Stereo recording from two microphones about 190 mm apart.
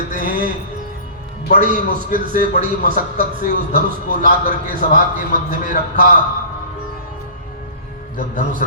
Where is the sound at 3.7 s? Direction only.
50° right (ahead or behind).